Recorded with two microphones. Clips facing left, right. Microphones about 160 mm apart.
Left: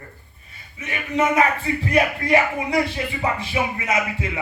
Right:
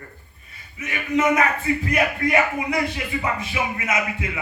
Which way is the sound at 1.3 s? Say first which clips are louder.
Left 1 dB; 30° left (ahead or behind).